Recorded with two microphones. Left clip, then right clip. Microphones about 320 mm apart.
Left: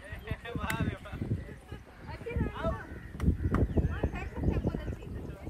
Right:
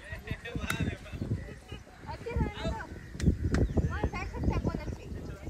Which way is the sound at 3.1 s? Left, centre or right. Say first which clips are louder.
Right 1 dB; centre.